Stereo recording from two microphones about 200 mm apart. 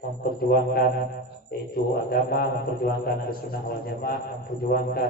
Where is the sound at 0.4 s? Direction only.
50° left (ahead or behind).